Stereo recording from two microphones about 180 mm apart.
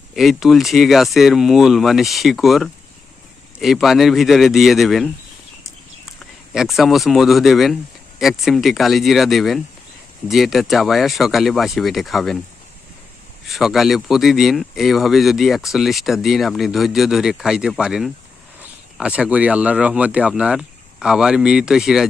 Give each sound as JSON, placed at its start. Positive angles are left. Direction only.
{"t": 0.2, "sound": "speech", "side_deg": 0}
{"t": 6.5, "sound": "speech", "side_deg": 0}
{"t": 13.5, "sound": "speech", "side_deg": 0}